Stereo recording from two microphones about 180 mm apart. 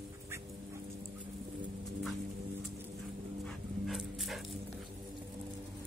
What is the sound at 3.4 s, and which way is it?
Dog, centre (ahead or behind).